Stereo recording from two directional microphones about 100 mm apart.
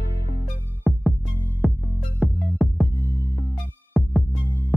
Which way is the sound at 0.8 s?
Centre (ahead or behind).